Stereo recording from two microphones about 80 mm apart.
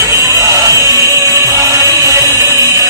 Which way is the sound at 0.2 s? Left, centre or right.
Right.